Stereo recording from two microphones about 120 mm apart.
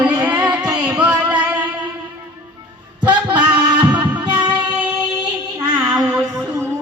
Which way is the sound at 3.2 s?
40° right (ahead or behind).